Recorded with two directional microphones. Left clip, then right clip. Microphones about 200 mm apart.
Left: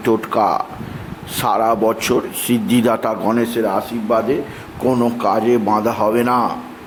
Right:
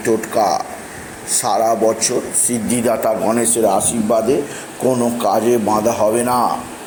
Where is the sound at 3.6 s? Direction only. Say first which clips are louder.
Right 3 dB; centre (ahead or behind).